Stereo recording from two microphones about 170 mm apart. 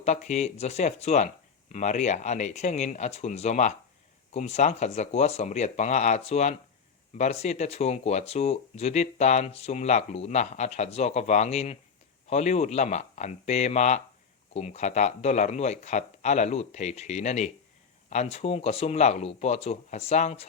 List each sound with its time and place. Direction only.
0.0 s speech: 40° left (ahead or behind)